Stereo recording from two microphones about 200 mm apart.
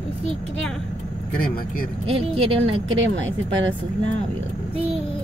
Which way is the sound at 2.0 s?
30° right (ahead or behind).